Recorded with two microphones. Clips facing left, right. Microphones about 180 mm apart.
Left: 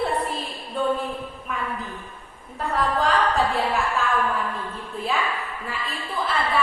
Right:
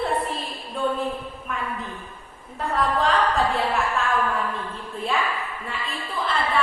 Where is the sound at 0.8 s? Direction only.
Centre (ahead or behind).